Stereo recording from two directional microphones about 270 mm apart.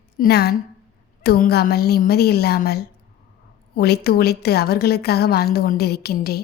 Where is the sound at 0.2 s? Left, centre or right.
Left.